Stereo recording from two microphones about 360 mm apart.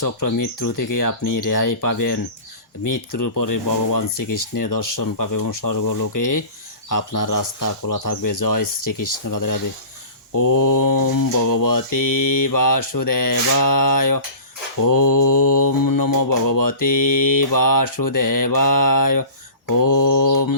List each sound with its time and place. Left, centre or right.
0.0 s mantra: left
3.2 s mantra: left